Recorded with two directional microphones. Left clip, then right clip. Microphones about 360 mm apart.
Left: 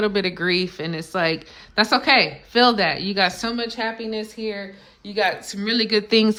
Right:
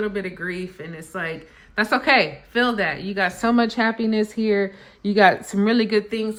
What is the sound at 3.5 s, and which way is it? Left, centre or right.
Speech, centre.